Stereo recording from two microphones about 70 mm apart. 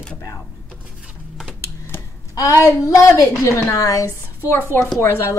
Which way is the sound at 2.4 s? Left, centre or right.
Left.